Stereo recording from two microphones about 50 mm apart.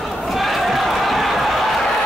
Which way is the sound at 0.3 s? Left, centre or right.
Centre.